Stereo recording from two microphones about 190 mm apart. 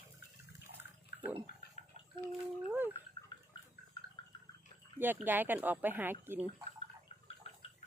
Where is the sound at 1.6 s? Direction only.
55° left (ahead or behind).